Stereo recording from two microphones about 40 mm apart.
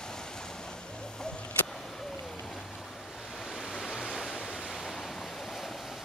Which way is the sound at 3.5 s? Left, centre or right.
Centre.